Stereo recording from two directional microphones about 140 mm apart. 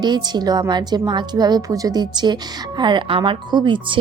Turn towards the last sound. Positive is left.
turn(degrees=-35)  # may be behind; listen again after turning